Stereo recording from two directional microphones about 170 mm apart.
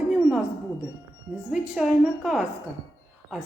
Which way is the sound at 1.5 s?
5° right (ahead or behind).